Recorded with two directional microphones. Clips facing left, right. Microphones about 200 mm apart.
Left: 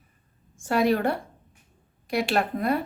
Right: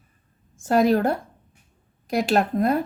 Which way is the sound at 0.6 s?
40° right (ahead or behind).